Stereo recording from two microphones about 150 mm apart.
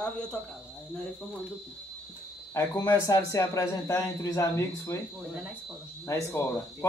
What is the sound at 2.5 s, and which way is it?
A man's voice, 20° left (ahead or behind).